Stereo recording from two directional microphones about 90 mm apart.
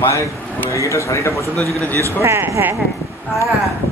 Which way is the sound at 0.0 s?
35° left (ahead or behind).